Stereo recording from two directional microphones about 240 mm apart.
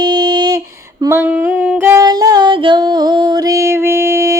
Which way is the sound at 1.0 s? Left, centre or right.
Centre.